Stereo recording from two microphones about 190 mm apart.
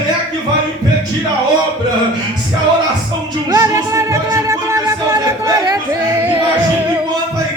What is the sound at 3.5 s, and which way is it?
Music, 15° right (ahead or behind).